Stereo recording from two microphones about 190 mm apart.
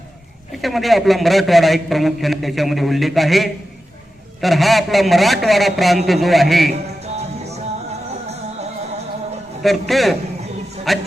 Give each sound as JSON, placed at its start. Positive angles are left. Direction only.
{"t": 0.5, "sound": "a man's voice", "side_deg": 0}
{"t": 7.0, "sound": "music", "side_deg": -35}
{"t": 9.6, "sound": "a man's voice", "side_deg": 0}